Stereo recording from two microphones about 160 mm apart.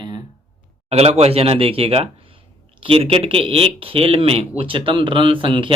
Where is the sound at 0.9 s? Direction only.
40° right (ahead or behind).